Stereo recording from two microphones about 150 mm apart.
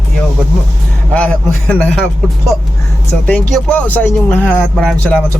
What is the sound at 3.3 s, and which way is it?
Speech, 5° left (ahead or behind).